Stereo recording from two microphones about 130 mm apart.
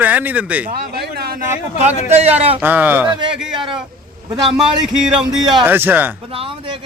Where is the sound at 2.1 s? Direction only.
55° right (ahead or behind).